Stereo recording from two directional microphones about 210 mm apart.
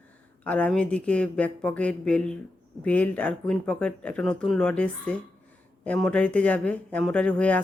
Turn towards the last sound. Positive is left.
turn(degrees=5)  # may be behind; listen again after turning